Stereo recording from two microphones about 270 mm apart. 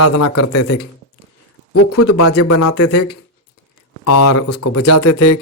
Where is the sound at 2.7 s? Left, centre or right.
Left.